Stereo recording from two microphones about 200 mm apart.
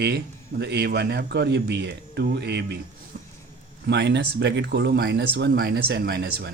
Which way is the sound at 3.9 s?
60° right (ahead or behind).